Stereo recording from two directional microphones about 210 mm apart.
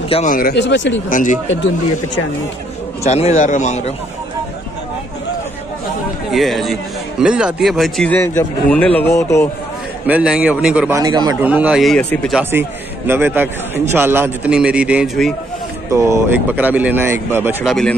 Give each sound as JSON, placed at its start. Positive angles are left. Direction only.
{"t": 0.1, "sound": "speech", "side_deg": 35}
{"t": 1.1, "sound": "a man's voice", "side_deg": 35}
{"t": 3.0, "sound": "a man's voice", "side_deg": 30}
{"t": 6.3, "sound": "a man's voice", "side_deg": 0}
{"t": 10.0, "sound": "a man's voice", "side_deg": -5}
{"t": 11.0, "sound": "a man's voice", "side_deg": -20}
{"t": 11.4, "sound": "a man's voice", "side_deg": -5}
{"t": 12.4, "sound": "a man's voice", "side_deg": -10}
{"t": 15.9, "sound": "a man's voice", "side_deg": -15}
{"t": 17.6, "sound": "a man's voice", "side_deg": 0}